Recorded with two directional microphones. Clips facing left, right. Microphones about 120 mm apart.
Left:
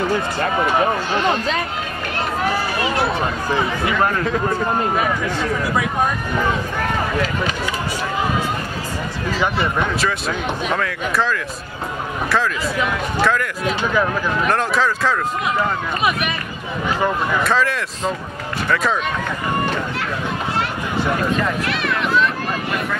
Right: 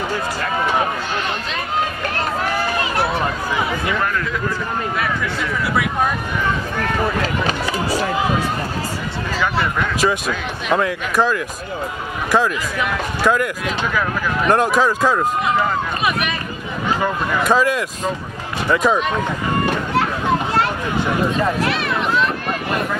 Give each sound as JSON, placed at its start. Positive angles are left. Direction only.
{"t": 3.8, "sound": "speech", "side_deg": 30}
{"t": 9.9, "sound": "speech", "side_deg": -15}
{"t": 13.2, "sound": "speech", "side_deg": -15}
{"t": 14.5, "sound": "speech", "side_deg": -15}
{"t": 17.4, "sound": "speech", "side_deg": -15}